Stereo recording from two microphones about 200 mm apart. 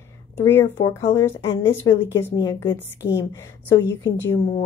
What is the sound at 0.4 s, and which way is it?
A woman's voice, 10° left (ahead or behind).